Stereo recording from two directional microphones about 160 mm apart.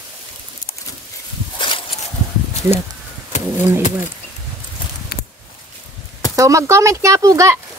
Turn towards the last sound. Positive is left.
turn(degrees=-20)  # may be behind; listen again after turning